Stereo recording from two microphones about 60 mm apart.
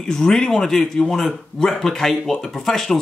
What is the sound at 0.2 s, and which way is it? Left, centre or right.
A man's voice, centre.